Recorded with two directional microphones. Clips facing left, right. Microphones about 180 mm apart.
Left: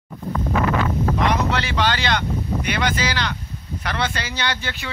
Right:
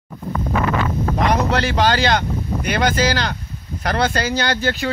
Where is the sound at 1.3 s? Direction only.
40° right (ahead or behind).